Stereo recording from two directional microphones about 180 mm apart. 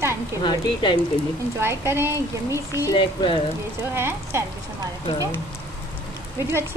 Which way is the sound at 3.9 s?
15° right (ahead or behind).